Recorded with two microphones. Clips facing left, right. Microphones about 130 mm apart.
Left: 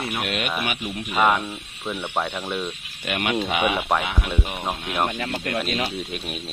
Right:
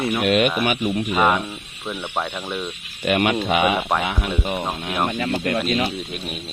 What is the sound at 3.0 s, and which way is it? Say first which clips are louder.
Speech: right 5 dB; 65° right (ahead or behind).